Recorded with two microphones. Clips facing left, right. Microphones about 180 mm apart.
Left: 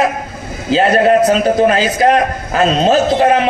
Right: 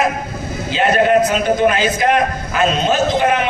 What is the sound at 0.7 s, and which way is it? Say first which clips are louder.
A man's voice: left 3 dB; 35° left (ahead or behind).